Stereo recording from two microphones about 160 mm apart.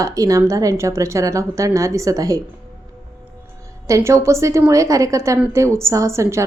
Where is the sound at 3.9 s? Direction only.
20° right (ahead or behind).